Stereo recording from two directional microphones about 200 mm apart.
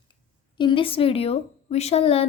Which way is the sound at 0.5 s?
25° left (ahead or behind).